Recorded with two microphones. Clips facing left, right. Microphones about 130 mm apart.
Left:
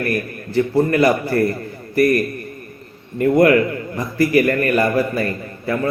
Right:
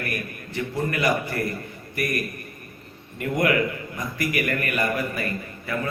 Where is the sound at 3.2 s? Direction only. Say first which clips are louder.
Left 9 dB; 40° left (ahead or behind).